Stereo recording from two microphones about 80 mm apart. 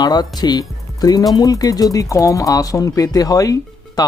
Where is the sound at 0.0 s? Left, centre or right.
Left.